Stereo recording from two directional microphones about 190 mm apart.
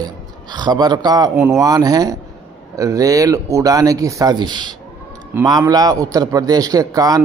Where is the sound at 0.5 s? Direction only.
20° right (ahead or behind).